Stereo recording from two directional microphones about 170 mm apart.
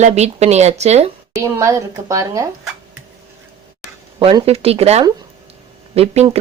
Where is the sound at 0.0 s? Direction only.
40° right (ahead or behind).